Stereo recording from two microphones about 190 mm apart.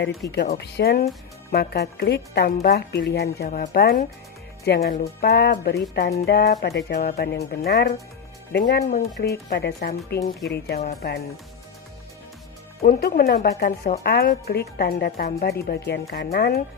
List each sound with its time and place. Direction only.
0.0 s speech: 65° left (ahead or behind)
12.8 s speech: 50° left (ahead or behind)